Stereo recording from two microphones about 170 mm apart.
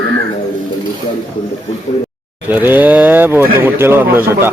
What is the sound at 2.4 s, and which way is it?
Speech, 10° right (ahead or behind).